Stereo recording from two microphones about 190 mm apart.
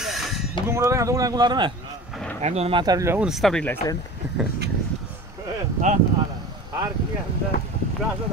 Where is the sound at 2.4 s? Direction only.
35° right (ahead or behind); by 3.2 s 15° right (ahead or behind).